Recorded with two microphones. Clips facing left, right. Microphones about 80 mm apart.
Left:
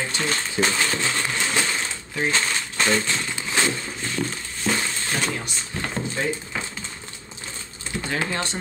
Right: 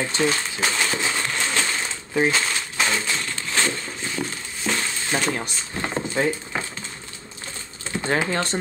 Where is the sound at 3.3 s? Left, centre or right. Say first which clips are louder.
Left 1 dB; centre.